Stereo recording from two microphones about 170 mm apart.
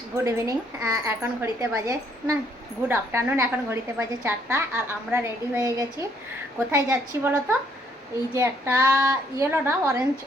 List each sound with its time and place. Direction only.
0.2 s a woman's voice: 20° right (ahead or behind)